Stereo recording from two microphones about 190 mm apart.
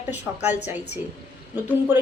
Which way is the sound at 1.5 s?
10° right (ahead or behind).